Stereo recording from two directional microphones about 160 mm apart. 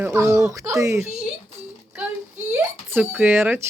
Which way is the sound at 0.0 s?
15° right (ahead or behind).